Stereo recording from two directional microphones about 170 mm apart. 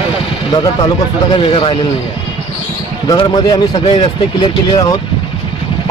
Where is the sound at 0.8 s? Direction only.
30° left (ahead or behind).